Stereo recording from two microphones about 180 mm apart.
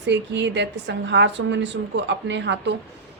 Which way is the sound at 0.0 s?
80° right.